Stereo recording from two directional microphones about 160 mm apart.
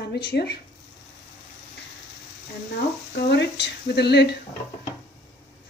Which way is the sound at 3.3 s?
90° left.